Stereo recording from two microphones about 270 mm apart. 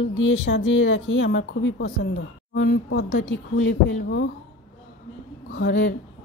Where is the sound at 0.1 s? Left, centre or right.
Left.